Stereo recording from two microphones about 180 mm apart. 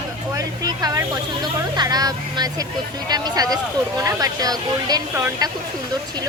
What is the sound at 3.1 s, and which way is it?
Speech, 20° right (ahead or behind).